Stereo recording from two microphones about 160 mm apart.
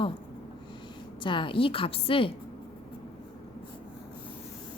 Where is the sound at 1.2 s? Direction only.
30° left (ahead or behind).